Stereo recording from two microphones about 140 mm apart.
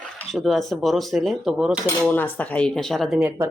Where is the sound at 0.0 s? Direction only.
5° left (ahead or behind).